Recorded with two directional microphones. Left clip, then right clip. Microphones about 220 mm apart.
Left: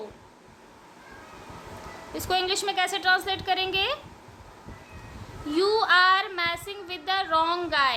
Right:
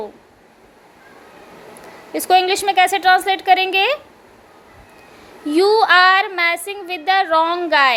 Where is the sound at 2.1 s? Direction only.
25° right (ahead or behind).